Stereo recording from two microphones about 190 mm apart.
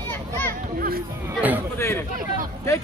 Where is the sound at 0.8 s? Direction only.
50° right (ahead or behind).